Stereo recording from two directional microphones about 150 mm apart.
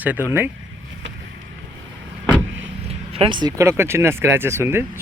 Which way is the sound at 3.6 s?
15° right (ahead or behind).